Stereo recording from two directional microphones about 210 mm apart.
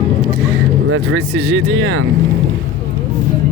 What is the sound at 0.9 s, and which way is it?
Speech, 85° right.